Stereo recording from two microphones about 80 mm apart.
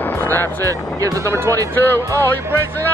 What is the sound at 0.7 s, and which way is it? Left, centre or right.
Speech, right.